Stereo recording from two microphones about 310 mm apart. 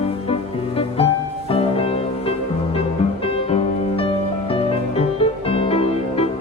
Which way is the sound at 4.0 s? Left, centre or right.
Centre.